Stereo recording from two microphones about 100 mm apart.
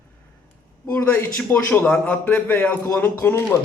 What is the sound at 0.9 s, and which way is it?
A man's voice, 20° left (ahead or behind).